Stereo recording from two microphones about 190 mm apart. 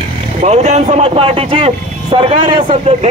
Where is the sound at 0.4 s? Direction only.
35° right (ahead or behind).